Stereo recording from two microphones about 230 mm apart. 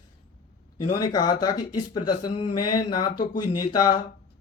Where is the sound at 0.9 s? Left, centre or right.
Centre.